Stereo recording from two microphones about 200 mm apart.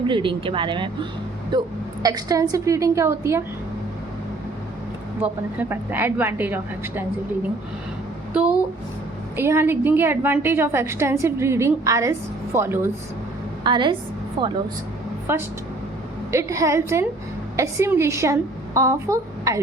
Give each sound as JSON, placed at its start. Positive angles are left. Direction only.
{"t": 0.1, "sound": "a woman's voice", "side_deg": -25}
{"t": 5.2, "sound": "a woman's voice", "side_deg": -10}
{"t": 8.3, "sound": "a sound", "side_deg": -5}
{"t": 9.3, "sound": "a woman's voice", "side_deg": -10}
{"t": 13.7, "sound": "speech", "side_deg": -25}
{"t": 15.3, "sound": "a woman's voice", "side_deg": -10}